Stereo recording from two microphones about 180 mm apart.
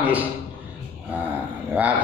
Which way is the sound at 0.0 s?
10° right (ahead or behind).